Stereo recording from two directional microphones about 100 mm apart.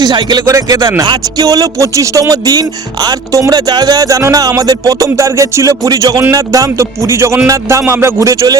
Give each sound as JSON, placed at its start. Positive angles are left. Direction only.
{"t": 0.0, "sound": "speech", "side_deg": -50}